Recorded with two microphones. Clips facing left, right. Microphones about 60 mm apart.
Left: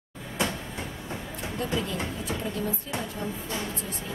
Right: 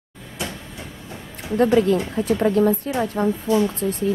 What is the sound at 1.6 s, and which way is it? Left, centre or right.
A woman's voice, right.